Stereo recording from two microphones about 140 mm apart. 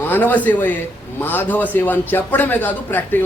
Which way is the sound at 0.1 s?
10° left (ahead or behind).